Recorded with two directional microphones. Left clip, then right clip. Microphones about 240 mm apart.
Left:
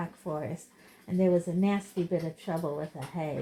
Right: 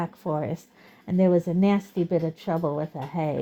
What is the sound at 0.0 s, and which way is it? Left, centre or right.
Speech, right.